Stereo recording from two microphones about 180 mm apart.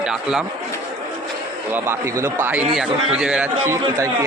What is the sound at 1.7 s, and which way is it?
A man's voice, 15° right (ahead or behind).